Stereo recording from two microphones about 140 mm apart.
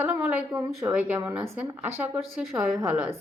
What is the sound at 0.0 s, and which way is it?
A woman's voice, 10° right (ahead or behind).